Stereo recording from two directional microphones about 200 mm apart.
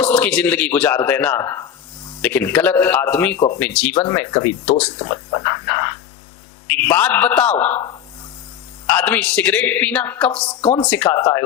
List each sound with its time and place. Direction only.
0.0 s speech: 5° left (ahead or behind)
4.7 s speech: 25° left (ahead or behind)
6.7 s speech: 10° left (ahead or behind)
9.0 s speech: 5° left (ahead or behind)
10.4 s speech: 30° left (ahead or behind)
10.8 s speech: 5° left (ahead or behind)
11.1 s speech: 20° left (ahead or behind)